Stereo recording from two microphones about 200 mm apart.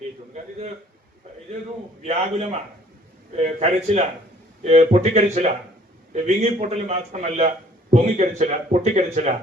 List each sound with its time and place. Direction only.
2.0 s a man's voice: 35° right (ahead or behind)